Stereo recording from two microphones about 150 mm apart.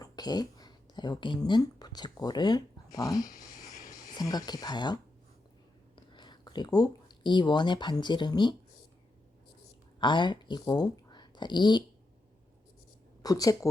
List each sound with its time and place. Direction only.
0.0 s speech: 25° left (ahead or behind)
6.1 s speech: 30° left (ahead or behind)
10.0 s speech: 30° left (ahead or behind)
13.2 s speech: 25° left (ahead or behind)